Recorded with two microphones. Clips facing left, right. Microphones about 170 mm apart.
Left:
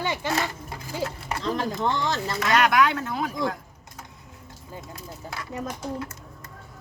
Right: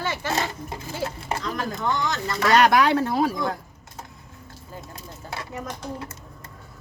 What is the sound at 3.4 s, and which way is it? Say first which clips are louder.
Typing: even; 30° right (ahead or behind).